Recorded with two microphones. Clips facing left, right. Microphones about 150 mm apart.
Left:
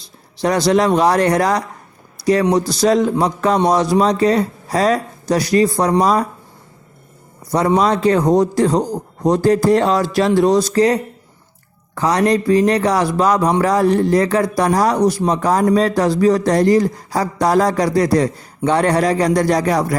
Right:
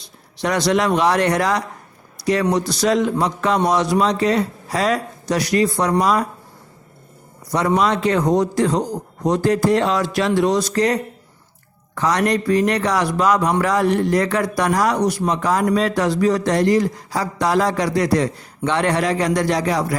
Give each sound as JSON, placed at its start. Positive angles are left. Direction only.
{"t": 0.4, "sound": "speech", "side_deg": 35}
{"t": 7.8, "sound": "speech", "side_deg": 40}